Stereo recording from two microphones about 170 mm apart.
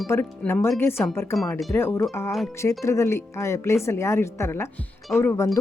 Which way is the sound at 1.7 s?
15° left (ahead or behind).